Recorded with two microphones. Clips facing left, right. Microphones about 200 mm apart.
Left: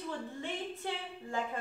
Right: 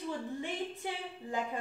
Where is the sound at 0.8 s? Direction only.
10° right (ahead or behind).